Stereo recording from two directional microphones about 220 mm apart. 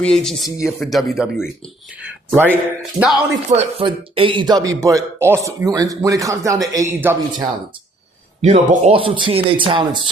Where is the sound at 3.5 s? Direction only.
30° right (ahead or behind).